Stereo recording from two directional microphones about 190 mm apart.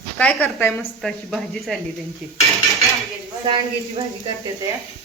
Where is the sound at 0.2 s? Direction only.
5° left (ahead or behind).